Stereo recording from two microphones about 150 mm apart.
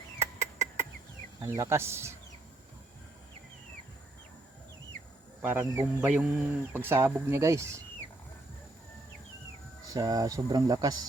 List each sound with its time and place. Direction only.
0.2 s a sound: 20° right (ahead or behind)
1.4 s speech: 20° right (ahead or behind)
5.4 s speech: 15° right (ahead or behind)
9.8 s speech: 25° right (ahead or behind)